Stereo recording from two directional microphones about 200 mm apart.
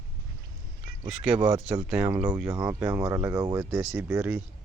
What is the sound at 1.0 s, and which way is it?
Speech, 5° right (ahead or behind).